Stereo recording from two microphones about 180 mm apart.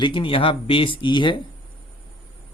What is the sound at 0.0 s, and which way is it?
Speech, 30° left (ahead or behind).